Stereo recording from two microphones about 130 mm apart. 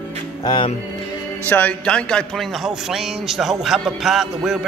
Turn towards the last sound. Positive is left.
turn(degrees=0)  # may be behind; listen again after turning